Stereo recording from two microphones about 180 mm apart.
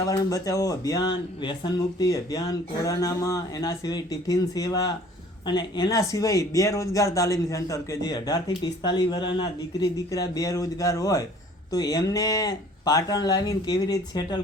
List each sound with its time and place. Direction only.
0.1 s speech: 20° left (ahead or behind)